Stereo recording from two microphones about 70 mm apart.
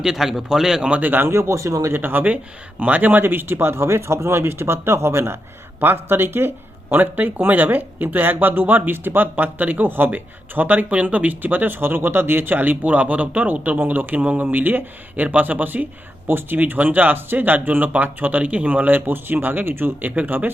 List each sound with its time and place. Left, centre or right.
0.0 s speech: centre
0.9 s speech: right
1.9 s speech: right